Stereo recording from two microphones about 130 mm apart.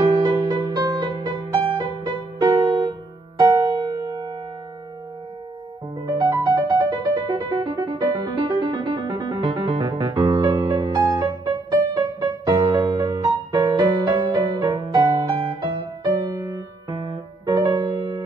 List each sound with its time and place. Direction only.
0.2 s music: 30° right (ahead or behind)
2.5 s music: 40° right (ahead or behind)
6.0 s music: 25° right (ahead or behind)